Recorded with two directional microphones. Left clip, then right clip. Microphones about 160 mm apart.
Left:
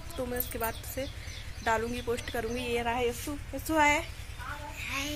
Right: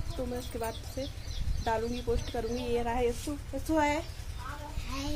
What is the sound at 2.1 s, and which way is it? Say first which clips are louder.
Speech: left 1 dB; 5° left (ahead or behind).